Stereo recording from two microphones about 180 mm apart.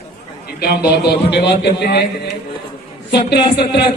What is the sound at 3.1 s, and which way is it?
Speech, 65° left (ahead or behind).